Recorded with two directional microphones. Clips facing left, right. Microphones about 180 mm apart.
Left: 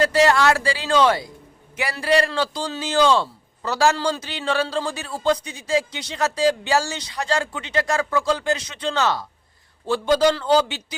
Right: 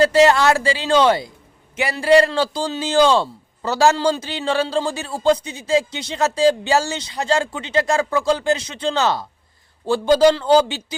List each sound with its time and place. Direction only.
0.0 s a man's voice: 25° right (ahead or behind)